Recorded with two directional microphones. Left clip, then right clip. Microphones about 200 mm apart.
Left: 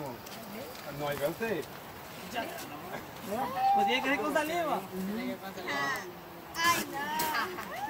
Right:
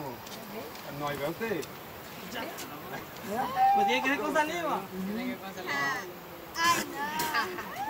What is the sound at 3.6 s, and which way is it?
Speech, 20° right (ahead or behind).